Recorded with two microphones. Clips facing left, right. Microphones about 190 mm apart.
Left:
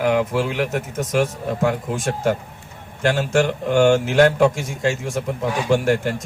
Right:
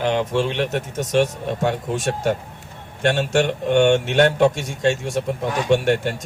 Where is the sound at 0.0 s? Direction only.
25° right (ahead or behind).